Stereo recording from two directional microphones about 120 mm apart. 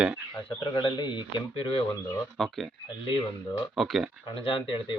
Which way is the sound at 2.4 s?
Centre (ahead or behind).